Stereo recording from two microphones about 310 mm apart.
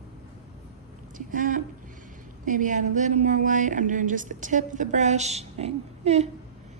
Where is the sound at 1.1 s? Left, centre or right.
Right.